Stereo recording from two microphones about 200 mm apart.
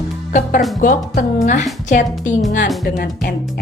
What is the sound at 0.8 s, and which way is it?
A woman's voice, 40° left (ahead or behind).